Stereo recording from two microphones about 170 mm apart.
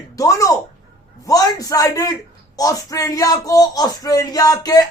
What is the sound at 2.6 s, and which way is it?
Speech, 20° left (ahead or behind).